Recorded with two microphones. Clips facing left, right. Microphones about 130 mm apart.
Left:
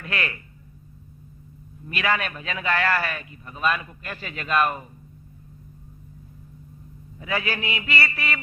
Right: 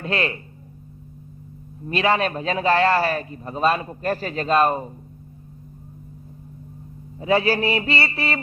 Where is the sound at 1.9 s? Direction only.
30° right (ahead or behind).